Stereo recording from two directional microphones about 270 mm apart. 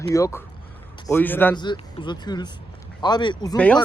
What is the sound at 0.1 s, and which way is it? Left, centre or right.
Speech, centre.